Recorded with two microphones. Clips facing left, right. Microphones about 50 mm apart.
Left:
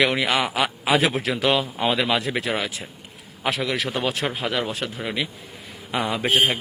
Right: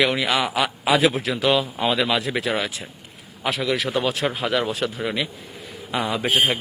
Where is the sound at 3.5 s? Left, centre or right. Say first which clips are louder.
Right 4 dB; left.